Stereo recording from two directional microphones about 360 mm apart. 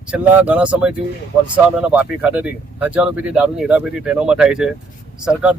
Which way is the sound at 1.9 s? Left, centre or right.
Centre.